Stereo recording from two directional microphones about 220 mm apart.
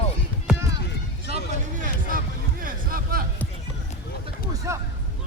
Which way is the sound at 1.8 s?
40° right (ahead or behind).